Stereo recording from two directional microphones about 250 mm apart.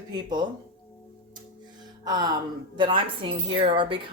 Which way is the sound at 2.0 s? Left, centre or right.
Centre.